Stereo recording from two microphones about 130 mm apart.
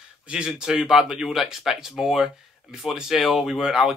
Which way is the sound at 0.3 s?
5° right (ahead or behind).